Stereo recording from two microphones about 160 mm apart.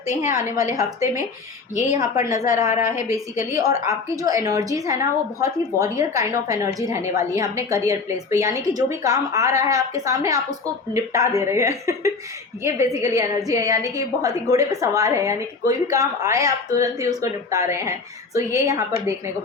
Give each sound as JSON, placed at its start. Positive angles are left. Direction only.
{"t": 0.1, "sound": "a woman's voice", "side_deg": 50}
{"t": 0.3, "sound": "a woman's voice", "side_deg": -20}
{"t": 1.7, "sound": "a woman's voice", "side_deg": 45}
{"t": 3.5, "sound": "a woman's voice", "side_deg": -20}